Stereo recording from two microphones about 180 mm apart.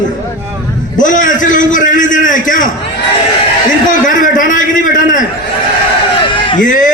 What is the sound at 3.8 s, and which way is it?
A man's voice, 45° left (ahead or behind).